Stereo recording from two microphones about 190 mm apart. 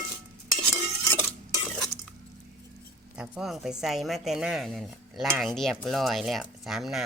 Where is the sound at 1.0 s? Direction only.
10° left (ahead or behind).